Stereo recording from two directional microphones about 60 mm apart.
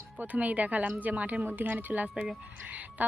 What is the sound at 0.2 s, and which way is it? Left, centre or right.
A woman's voice, right.